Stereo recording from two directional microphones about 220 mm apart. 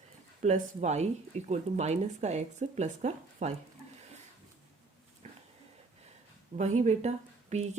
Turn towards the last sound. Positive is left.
turn(degrees=-30)  # may be behind; listen again after turning